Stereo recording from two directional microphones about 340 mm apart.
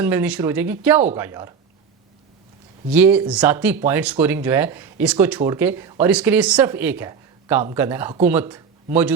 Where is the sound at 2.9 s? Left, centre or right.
Centre.